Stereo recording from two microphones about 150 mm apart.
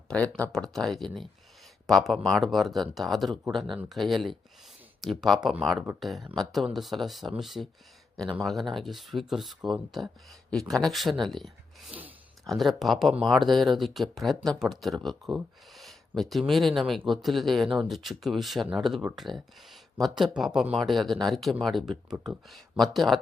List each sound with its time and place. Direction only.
0.1 s speech: 10° left (ahead or behind)